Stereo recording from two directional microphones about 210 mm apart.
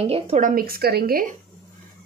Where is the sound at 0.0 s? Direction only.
30° right (ahead or behind).